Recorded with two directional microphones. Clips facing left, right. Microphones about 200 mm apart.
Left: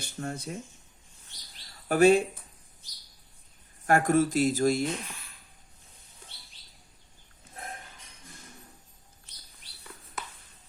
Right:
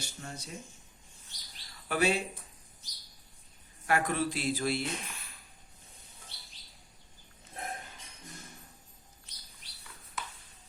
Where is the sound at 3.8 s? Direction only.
45° left (ahead or behind).